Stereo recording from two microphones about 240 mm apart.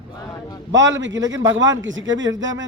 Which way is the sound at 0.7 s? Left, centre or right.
Right.